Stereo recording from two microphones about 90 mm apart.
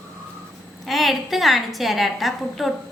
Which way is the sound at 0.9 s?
Centre (ahead or behind).